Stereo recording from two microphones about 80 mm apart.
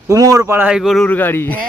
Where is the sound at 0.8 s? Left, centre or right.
Centre.